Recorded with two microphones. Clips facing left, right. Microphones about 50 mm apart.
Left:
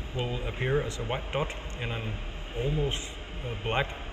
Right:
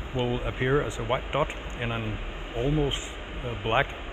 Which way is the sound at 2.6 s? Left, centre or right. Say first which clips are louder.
Right 4 dB; right.